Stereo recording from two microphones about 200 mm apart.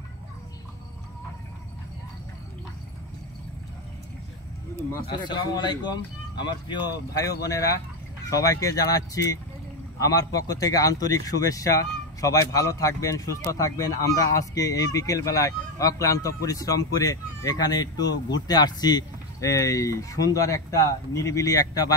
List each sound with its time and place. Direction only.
5.0 s a man's voice: 25° left (ahead or behind)